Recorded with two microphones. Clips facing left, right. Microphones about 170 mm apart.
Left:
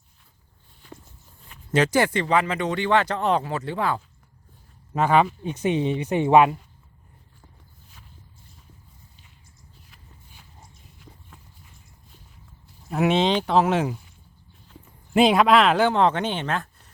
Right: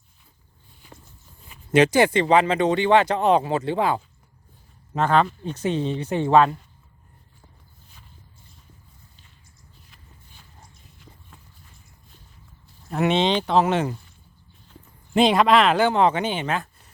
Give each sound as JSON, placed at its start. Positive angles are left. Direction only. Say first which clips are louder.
{"t": 1.7, "sound": "speech", "louder": "right 4 dB", "side_deg": -20}
{"t": 4.9, "sound": "speech", "louder": "left 1 dB", "side_deg": 10}
{"t": 9.9, "sound": "walk", "louder": "even", "side_deg": 5}
{"t": 12.9, "sound": "speech", "louder": "even", "side_deg": 5}
{"t": 15.1, "sound": "speech", "louder": "even", "side_deg": 5}